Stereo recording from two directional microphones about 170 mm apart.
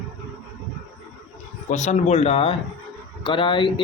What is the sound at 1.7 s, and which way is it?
Speech, 45° left (ahead or behind).